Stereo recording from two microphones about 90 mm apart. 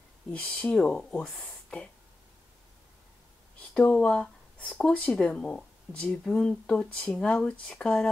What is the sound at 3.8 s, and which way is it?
Speech, 15° left (ahead or behind).